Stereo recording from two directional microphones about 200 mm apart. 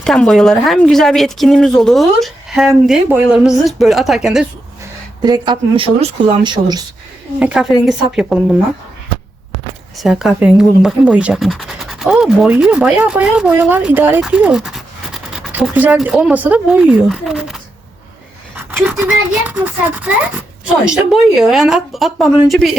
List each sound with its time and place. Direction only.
0.0 s speech: 5° left (ahead or behind)
5.2 s speech: 20° right (ahead or behind)
7.3 s speech: 5° right (ahead or behind)
10.0 s speech: centre (ahead or behind)
18.9 s a child's voice: 5° right (ahead or behind)